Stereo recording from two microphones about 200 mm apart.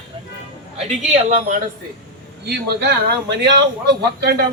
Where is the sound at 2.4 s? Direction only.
55° right (ahead or behind).